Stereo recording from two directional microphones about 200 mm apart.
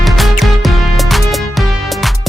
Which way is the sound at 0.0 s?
Centre (ahead or behind).